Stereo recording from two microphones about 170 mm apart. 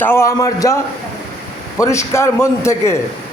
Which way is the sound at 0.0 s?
15° left (ahead or behind).